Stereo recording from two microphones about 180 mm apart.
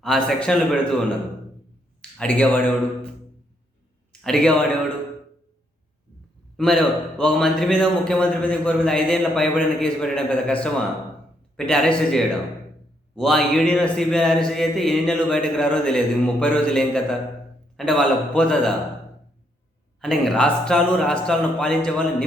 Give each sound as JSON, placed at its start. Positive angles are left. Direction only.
{"t": 0.0, "sound": "a man's voice", "side_deg": 0}
{"t": 2.0, "sound": "speech", "side_deg": 5}
{"t": 4.1, "sound": "a man's voice", "side_deg": 5}
{"t": 6.6, "sound": "a man's voice", "side_deg": 5}
{"t": 20.0, "sound": "a man's voice", "side_deg": 0}